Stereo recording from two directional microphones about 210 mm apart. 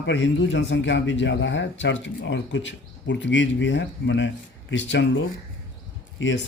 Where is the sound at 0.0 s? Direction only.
60° left (ahead or behind).